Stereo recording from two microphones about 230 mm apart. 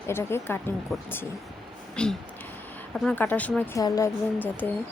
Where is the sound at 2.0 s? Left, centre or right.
Centre.